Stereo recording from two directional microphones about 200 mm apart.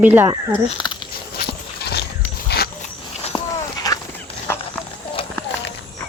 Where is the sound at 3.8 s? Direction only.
15° left (ahead or behind).